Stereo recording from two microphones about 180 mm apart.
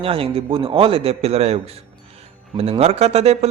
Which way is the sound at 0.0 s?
30° right (ahead or behind).